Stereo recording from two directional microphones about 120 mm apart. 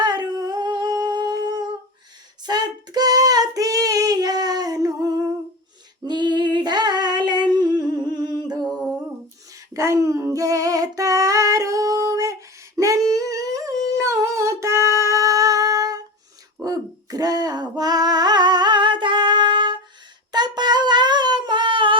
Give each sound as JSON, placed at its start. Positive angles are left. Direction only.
{"t": 0.0, "sound": "humming", "side_deg": -35}
{"t": 2.4, "sound": "child singing", "side_deg": -35}
{"t": 6.1, "sound": "humming", "side_deg": -40}
{"t": 9.7, "sound": "female singing", "side_deg": -25}
{"t": 16.6, "sound": "a sound", "side_deg": -30}